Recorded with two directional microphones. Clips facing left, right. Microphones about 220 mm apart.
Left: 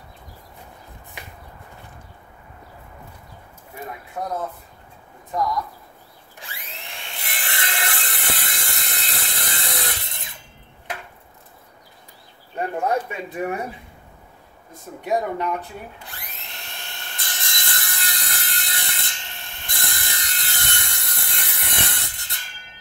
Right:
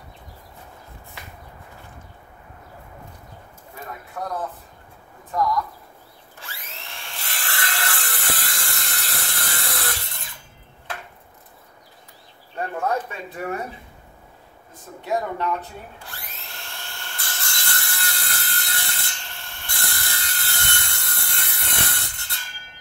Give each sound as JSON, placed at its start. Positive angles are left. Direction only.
{"t": 4.2, "sound": "speech", "side_deg": 20}
{"t": 6.3, "sound": "wood", "side_deg": 15}
{"t": 12.5, "sound": "speech", "side_deg": 15}
{"t": 15.0, "sound": "speech", "side_deg": 15}
{"t": 16.1, "sound": "dental drill", "side_deg": 20}